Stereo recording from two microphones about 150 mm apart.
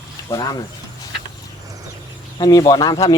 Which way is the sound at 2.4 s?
25° left (ahead or behind).